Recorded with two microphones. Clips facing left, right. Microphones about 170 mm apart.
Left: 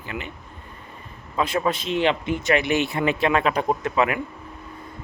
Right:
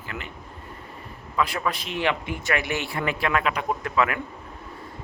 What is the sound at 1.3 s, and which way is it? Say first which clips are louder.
Speech: left 3 dB; 25° left (ahead or behind).